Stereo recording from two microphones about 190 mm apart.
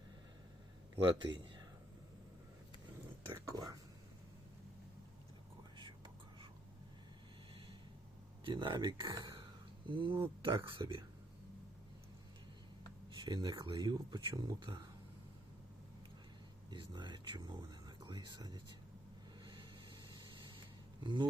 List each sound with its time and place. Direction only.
1.2 s speech: 25° right (ahead or behind)
3.3 s speech: 15° right (ahead or behind)
8.4 s speech: 25° right (ahead or behind)
13.2 s speech: 20° right (ahead or behind)
16.7 s speech: 25° right (ahead or behind)
21.0 s speech: 25° right (ahead or behind)